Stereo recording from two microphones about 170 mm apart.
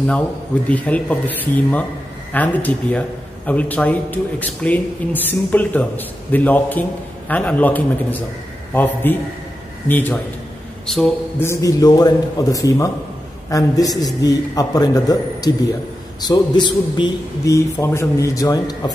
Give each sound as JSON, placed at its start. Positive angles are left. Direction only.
{"t": 0.7, "sound": "a man's voice", "side_deg": 10}
{"t": 11.3, "sound": "a man's voice", "side_deg": 15}